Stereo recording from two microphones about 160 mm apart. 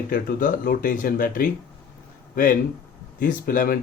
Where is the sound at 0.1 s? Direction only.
60° left (ahead or behind).